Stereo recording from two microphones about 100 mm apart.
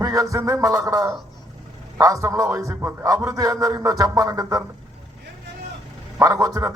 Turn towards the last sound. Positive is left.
turn(degrees=-35)  # may be behind; listen again after turning